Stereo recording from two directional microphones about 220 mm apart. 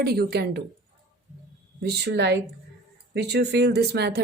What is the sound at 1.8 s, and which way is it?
Speech, 50° right (ahead or behind).